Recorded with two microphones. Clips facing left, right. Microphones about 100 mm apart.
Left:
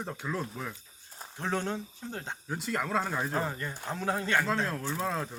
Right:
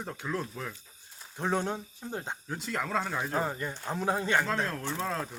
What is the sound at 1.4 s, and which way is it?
Speech, 15° right (ahead or behind).